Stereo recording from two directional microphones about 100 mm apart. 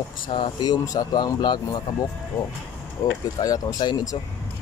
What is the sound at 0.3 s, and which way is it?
Speech, 50° left (ahead or behind).